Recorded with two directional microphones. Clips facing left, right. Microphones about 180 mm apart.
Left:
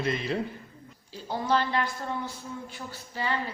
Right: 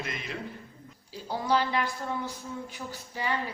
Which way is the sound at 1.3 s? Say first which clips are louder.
Even; 10° right (ahead or behind).